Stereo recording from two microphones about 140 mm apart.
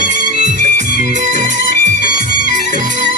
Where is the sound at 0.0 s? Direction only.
60° right (ahead or behind).